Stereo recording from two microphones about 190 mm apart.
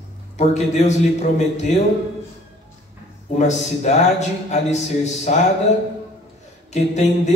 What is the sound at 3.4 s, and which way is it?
A man's voice, 35° left (ahead or behind).